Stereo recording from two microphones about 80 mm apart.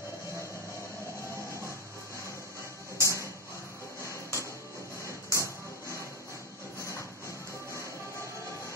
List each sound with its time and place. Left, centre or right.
3.0 s music: left
5.0 s a sound: left
6.8 s music: left